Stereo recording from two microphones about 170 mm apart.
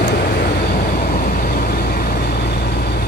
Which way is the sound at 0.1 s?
65° left (ahead or behind).